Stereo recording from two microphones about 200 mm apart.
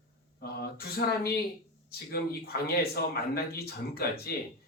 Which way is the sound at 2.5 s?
50° left (ahead or behind).